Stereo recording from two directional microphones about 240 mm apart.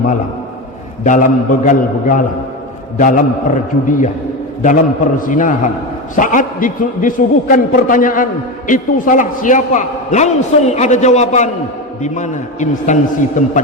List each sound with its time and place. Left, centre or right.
1.0 s a man's voice: left